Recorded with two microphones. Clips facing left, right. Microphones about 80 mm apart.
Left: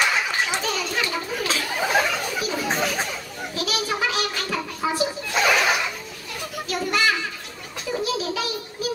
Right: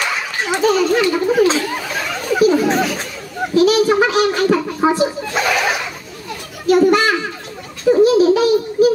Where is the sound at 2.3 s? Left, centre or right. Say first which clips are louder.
Right 14 dB; right.